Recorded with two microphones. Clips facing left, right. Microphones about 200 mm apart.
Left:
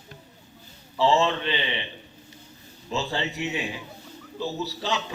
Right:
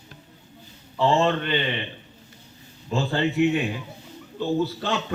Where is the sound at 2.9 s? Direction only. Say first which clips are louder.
Right 6 dB; 55° right (ahead or behind).